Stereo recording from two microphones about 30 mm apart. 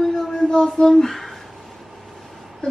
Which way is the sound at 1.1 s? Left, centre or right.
Centre.